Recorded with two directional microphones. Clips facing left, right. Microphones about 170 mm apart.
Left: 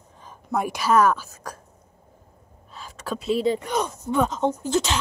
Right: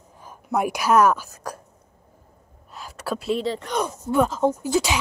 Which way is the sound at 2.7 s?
10° right (ahead or behind).